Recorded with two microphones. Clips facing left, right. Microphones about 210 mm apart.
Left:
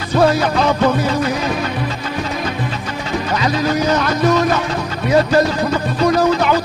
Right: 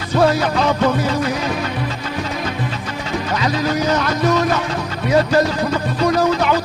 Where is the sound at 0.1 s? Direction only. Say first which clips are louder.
Left 1 dB; 35° left (ahead or behind).